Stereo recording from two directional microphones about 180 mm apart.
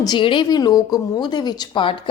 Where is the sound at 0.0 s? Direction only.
25° left (ahead or behind).